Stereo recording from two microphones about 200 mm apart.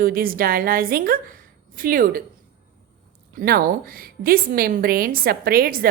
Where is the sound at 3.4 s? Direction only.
45° right (ahead or behind).